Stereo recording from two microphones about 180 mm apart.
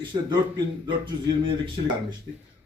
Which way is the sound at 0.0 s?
25° right (ahead or behind).